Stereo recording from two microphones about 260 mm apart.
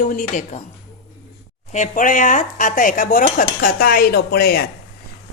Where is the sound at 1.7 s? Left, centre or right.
Left.